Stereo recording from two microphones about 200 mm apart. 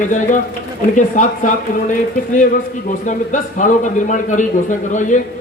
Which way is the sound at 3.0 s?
40° left (ahead or behind).